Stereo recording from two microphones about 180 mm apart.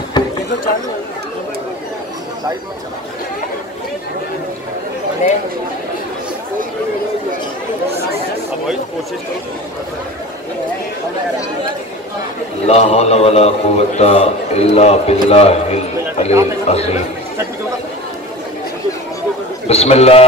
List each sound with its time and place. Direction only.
0.2 s a sound: 25° left (ahead or behind)
12.6 s a man's voice: 35° left (ahead or behind)
19.7 s a man's voice: 35° left (ahead or behind)